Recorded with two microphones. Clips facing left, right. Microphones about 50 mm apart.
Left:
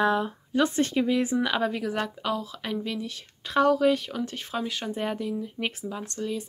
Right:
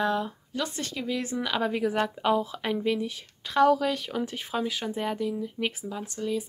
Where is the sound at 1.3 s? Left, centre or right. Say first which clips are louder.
Left 3 dB; centre.